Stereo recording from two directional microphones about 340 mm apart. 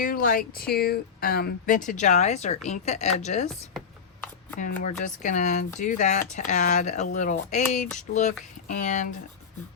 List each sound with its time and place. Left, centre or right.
0.0 s speech: left
4.8 s speech: left